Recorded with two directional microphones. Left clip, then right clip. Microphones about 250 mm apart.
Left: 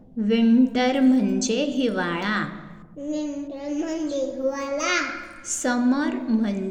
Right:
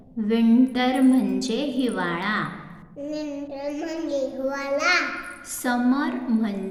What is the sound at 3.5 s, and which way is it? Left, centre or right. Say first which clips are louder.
Child singing: left 1 dB; right.